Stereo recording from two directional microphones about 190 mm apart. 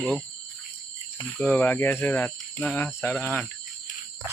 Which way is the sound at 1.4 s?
10° left (ahead or behind).